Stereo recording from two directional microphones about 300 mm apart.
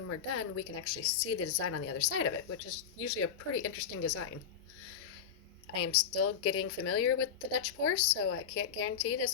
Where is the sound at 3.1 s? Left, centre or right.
Left.